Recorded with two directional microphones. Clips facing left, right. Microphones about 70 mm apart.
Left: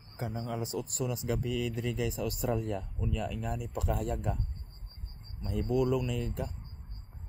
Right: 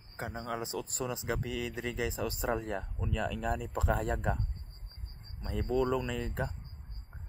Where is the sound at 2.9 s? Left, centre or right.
Right.